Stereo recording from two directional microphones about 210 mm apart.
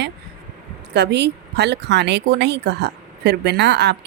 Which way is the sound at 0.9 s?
55° right (ahead or behind).